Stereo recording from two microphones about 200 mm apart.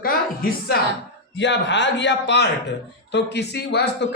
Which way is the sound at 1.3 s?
60° left (ahead or behind).